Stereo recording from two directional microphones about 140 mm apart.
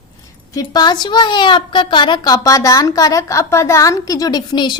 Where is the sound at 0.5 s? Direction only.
30° left (ahead or behind).